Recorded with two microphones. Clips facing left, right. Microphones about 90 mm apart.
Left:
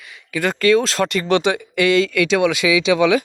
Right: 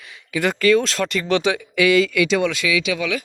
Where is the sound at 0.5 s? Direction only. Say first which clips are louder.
Left 2 dB; centre (ahead or behind).